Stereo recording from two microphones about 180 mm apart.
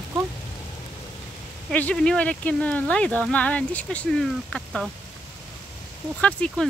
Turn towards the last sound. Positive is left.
turn(degrees=5)  # may be behind; listen again after turning